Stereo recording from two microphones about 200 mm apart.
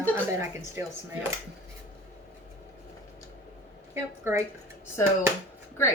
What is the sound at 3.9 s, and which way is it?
Speech, 10° right (ahead or behind).